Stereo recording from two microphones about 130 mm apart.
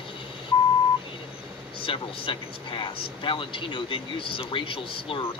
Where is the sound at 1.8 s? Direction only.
40° left (ahead or behind).